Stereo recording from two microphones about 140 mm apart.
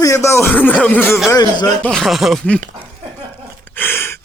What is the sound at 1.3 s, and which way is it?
Speech, 30° left (ahead or behind).